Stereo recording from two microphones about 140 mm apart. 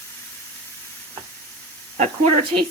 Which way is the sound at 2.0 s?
50° right (ahead or behind).